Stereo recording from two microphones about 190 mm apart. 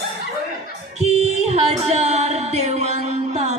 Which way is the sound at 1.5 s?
35° right (ahead or behind).